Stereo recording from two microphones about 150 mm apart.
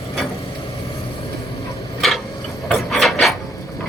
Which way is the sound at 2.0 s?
Centre (ahead or behind).